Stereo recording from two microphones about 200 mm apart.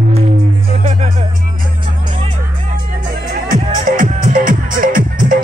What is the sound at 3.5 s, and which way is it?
Music, 40° right (ahead or behind).